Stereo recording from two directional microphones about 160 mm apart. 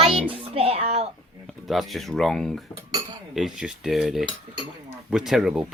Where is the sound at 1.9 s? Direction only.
Centre (ahead or behind).